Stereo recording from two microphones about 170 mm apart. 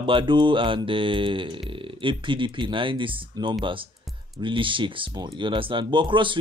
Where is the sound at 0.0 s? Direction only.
30° right (ahead or behind).